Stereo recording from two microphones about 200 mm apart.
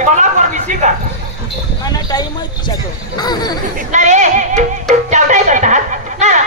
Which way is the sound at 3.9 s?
35° right (ahead or behind).